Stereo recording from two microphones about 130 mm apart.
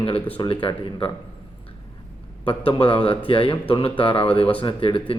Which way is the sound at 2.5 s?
40° left (ahead or behind).